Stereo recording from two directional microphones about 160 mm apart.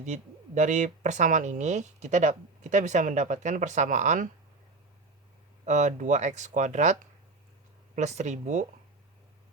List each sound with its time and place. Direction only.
0.0 s speech: 50° right (ahead or behind)
5.6 s speech: 50° right (ahead or behind)